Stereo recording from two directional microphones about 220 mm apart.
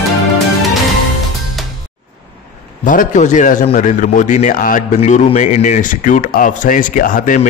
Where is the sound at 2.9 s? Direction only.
35° left (ahead or behind).